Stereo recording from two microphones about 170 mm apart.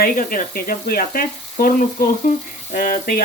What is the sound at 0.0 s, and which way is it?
Speech, 55° left (ahead or behind).